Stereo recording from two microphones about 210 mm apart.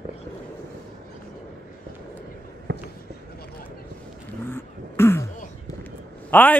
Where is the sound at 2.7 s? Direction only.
55° right (ahead or behind).